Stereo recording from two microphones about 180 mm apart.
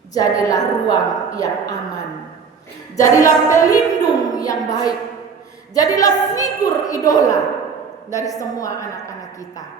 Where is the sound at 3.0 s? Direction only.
45° left (ahead or behind).